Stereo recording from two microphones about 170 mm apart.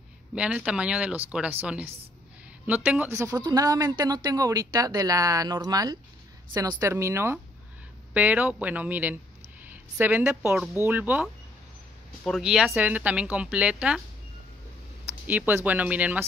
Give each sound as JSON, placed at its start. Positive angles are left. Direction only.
{"t": 0.3, "sound": "speech", "side_deg": -5}
{"t": 12.3, "sound": "speech", "side_deg": 0}
{"t": 15.2, "sound": "speech", "side_deg": -10}